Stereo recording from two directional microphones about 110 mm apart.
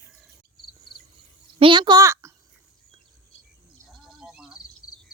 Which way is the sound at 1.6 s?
45° right (ahead or behind).